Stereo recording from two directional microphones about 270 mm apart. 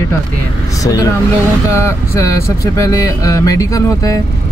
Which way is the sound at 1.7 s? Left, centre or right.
Centre.